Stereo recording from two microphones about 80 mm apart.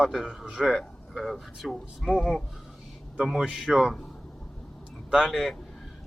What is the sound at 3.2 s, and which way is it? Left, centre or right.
Speech, centre.